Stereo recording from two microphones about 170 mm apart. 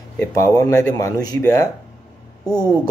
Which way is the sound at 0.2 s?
20° left (ahead or behind).